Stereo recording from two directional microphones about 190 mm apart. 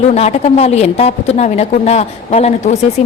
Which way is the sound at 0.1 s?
35° left (ahead or behind).